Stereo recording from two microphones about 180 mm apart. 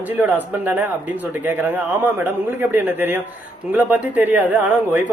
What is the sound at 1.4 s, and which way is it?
Speech, 10° right (ahead or behind).